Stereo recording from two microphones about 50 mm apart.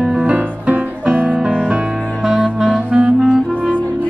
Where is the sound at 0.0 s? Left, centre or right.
Centre.